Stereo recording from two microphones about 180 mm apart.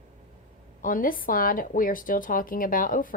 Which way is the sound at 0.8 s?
50° left (ahead or behind).